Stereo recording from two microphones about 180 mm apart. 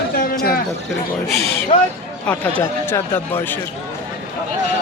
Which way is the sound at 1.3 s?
35° right (ahead or behind).